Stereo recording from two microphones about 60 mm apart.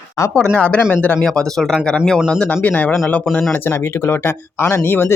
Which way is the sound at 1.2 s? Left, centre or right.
Centre.